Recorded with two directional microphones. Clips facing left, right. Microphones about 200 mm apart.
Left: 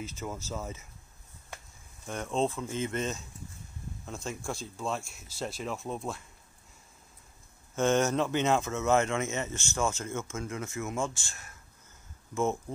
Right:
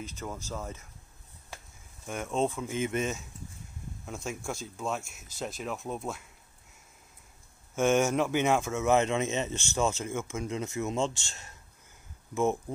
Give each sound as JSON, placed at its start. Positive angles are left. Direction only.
{"t": 0.5, "sound": "speech", "side_deg": 5}
{"t": 2.0, "sound": "speech", "side_deg": -5}
{"t": 4.0, "sound": "speech", "side_deg": -10}
{"t": 7.7, "sound": "speech", "side_deg": -10}